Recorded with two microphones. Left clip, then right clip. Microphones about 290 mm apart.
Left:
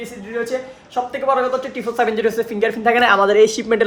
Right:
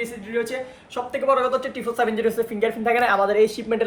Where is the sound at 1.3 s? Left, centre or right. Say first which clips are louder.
Left 1 dB; centre.